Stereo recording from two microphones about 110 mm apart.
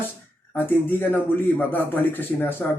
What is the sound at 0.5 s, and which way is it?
A man's voice, 20° left (ahead or behind).